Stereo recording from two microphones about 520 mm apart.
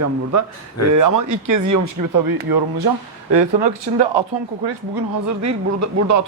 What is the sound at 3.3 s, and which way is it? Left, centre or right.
Speech, right.